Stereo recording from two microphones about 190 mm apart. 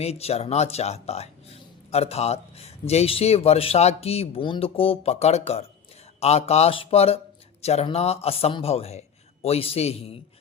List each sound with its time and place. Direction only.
0.0 s a man's voice: 35° left (ahead or behind)